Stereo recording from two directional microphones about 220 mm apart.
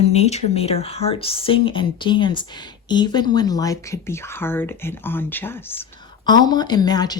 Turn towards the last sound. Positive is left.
turn(degrees=20)  # may be behind; listen again after turning